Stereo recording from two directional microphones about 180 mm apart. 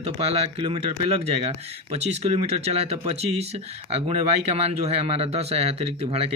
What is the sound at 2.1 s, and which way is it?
Speech, 35° right (ahead or behind).